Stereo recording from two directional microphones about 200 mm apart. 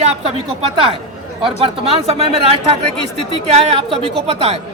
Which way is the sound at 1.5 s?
30° right (ahead or behind).